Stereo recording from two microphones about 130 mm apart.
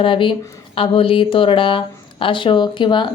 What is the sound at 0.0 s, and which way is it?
A woman's voice, 40° left (ahead or behind).